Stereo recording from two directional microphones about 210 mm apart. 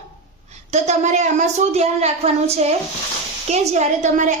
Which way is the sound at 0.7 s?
35° right (ahead or behind).